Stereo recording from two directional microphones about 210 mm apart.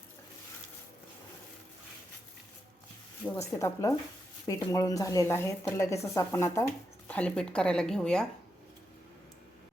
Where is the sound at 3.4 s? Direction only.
15° left (ahead or behind).